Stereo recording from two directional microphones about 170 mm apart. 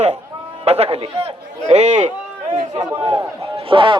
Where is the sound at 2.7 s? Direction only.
30° right (ahead or behind).